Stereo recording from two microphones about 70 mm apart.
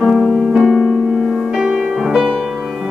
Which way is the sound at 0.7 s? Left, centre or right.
Centre.